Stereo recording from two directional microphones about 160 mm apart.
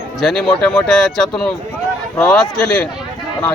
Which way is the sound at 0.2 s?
Centre (ahead or behind).